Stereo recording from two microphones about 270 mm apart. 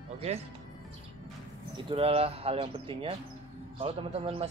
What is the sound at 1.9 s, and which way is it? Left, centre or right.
A man's voice, right.